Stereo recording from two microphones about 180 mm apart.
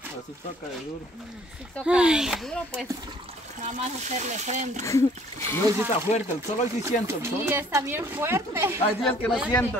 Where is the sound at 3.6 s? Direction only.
40° right (ahead or behind).